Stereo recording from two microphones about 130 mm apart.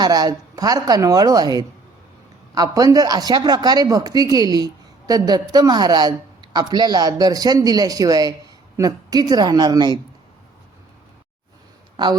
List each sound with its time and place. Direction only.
0.0 s a woman's voice: 30° right (ahead or behind)